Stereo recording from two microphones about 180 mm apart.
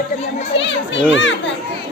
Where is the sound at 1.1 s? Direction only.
90° left.